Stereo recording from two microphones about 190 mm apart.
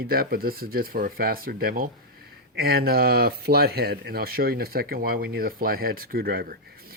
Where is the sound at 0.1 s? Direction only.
50° right (ahead or behind).